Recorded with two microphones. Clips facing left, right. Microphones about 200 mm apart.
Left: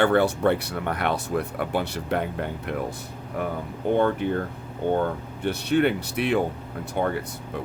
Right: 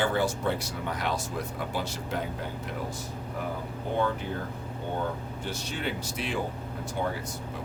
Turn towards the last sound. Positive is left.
turn(degrees=60)  # may be behind; listen again after turning